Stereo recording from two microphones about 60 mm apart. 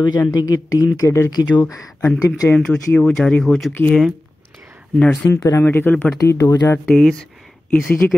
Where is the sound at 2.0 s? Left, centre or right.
Left.